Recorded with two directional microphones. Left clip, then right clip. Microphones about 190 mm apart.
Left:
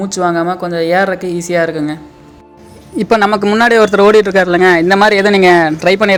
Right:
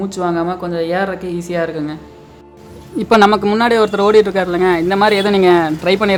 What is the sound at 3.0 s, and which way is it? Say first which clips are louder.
Speech: even; 15° left (ahead or behind).